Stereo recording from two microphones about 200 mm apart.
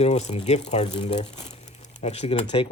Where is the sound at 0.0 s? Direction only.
35° left (ahead or behind).